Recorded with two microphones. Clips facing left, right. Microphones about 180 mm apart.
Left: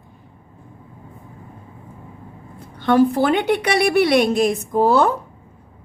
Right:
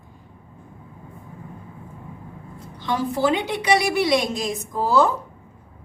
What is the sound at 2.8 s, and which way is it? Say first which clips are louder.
A woman's voice: left 7 dB; 60° left (ahead or behind).